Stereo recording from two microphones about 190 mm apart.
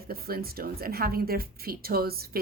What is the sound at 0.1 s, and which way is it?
A woman's voice, 55° right (ahead or behind).